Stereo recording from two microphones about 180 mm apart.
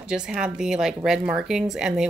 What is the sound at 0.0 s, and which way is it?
Speech, 5° right (ahead or behind).